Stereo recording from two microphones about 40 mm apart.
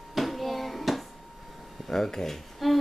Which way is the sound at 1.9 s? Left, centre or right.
Centre.